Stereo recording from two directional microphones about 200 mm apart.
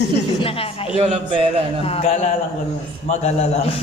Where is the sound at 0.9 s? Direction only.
25° right (ahead or behind).